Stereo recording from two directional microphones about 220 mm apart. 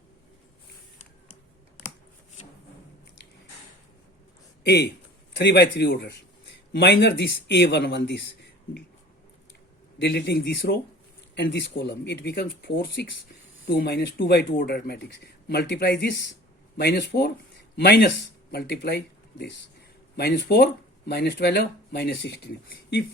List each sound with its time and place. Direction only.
4.6 s speech: 45° left (ahead or behind)
10.0 s speech: 50° left (ahead or behind)